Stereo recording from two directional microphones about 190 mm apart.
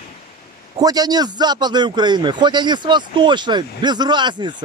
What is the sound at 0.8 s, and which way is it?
A man's voice, 20° right (ahead or behind).